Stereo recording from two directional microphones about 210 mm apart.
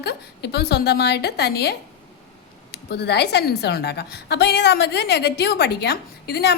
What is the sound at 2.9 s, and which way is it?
A woman's voice, 50° left (ahead or behind).